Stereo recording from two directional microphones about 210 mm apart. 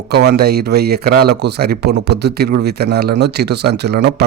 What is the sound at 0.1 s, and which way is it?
Speech, 50° right (ahead or behind).